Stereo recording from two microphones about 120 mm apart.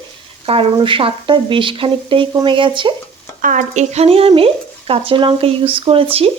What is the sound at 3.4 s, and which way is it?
Speech, 85° right.